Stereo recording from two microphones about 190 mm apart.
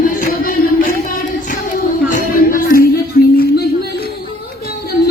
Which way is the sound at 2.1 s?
45° left (ahead or behind).